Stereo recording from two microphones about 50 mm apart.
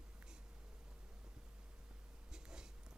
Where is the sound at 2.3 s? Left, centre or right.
Centre.